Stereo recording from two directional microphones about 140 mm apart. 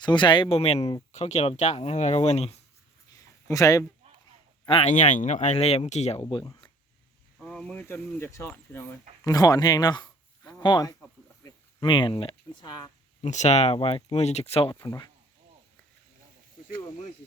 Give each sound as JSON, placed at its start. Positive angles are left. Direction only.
{"t": 0.0, "sound": "speech", "side_deg": 35}
{"t": 3.5, "sound": "speech", "side_deg": 25}
{"t": 4.6, "sound": "speech", "side_deg": 40}
{"t": 4.9, "sound": "speech", "side_deg": 60}
{"t": 7.3, "sound": "speech", "side_deg": 5}
{"t": 13.2, "sound": "speech", "side_deg": 55}
{"t": 14.8, "sound": "speech", "side_deg": 25}